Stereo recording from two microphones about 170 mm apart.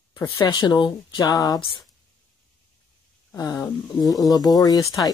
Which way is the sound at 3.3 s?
20° left (ahead or behind).